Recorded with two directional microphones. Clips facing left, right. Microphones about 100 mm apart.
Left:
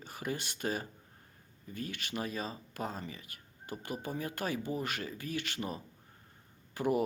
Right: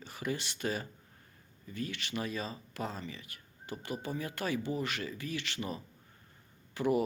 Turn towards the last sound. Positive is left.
turn(degrees=45)  # may be behind; listen again after turning